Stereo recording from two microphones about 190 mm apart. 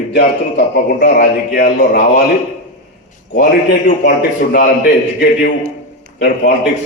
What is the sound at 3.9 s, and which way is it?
Speech, 60° left (ahead or behind).